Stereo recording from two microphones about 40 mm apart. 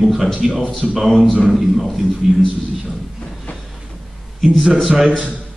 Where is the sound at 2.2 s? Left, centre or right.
Centre.